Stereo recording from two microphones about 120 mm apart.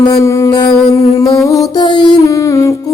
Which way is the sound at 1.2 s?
30° left (ahead or behind).